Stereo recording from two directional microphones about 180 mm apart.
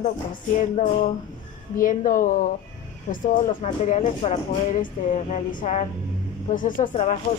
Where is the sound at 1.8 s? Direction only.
45° left (ahead or behind).